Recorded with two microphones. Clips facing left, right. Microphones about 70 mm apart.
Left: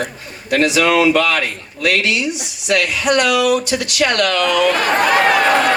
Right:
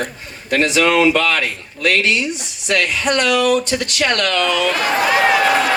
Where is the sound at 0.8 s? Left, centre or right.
Left.